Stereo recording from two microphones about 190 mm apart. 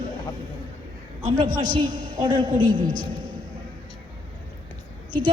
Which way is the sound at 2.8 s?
45° right (ahead or behind).